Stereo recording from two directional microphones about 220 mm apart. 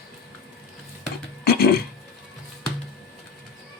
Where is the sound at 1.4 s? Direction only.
45° left (ahead or behind).